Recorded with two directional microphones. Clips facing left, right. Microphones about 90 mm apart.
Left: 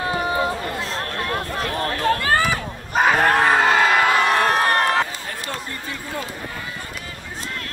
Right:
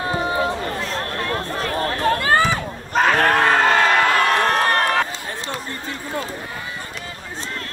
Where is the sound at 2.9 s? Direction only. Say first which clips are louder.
Even; 5° left (ahead or behind).